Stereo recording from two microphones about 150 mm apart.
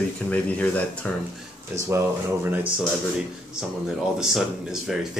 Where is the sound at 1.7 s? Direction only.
20° right (ahead or behind).